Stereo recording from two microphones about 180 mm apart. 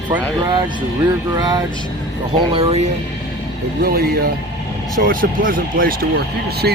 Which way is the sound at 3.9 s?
55° right (ahead or behind).